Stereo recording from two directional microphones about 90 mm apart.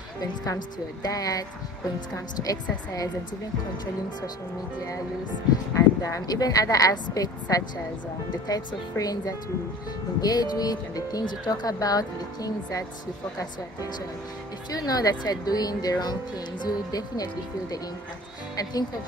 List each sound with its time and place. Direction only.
0.2 s a woman's voice: 45° left (ahead or behind)
5.8 s a woman's voice: 35° left (ahead or behind)
14.7 s speech: 45° left (ahead or behind)